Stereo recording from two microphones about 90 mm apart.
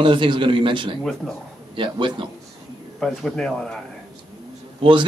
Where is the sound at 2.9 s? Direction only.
5° left (ahead or behind).